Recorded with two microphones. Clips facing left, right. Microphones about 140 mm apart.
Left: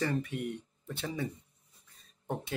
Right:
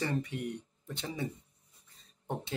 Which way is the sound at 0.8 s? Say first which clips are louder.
Left 3 dB; 25° right (ahead or behind).